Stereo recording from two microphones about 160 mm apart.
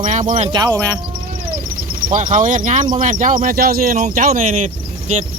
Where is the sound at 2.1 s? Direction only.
50° right (ahead or behind).